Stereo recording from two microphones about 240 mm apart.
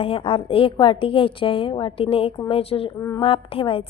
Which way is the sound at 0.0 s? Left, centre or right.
Left.